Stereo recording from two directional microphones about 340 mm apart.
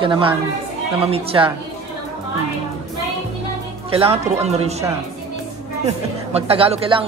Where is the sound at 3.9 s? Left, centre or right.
Centre.